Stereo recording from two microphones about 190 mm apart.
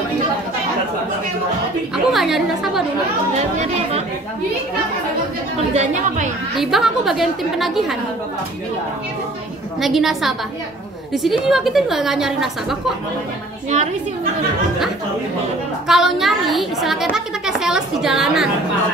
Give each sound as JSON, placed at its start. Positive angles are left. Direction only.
{"t": 2.0, "sound": "a woman's voice", "side_deg": 0}
{"t": 5.8, "sound": "a woman's voice", "side_deg": -40}
{"t": 6.5, "sound": "a woman's voice", "side_deg": 0}
{"t": 9.8, "sound": "a woman's voice", "side_deg": 0}
{"t": 11.4, "sound": "a woman's voice", "side_deg": 0}
{"t": 15.9, "sound": "a woman's voice", "side_deg": 0}